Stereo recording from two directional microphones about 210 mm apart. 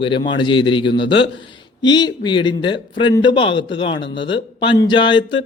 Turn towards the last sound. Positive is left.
turn(degrees=20)  # may be behind; listen again after turning